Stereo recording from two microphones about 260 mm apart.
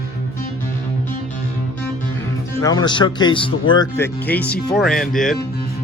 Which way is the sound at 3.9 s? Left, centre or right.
Centre.